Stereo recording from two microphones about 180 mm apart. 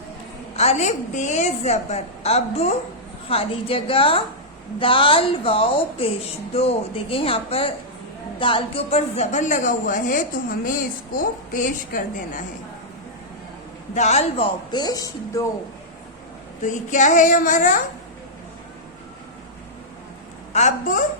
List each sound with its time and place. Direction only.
0.5 s a woman's voice: 35° left (ahead or behind)
13.9 s speech: 40° left (ahead or behind)
14.7 s speech: 20° left (ahead or behind)
16.6 s a woman's voice: 45° left (ahead or behind)
20.5 s speech: 40° left (ahead or behind)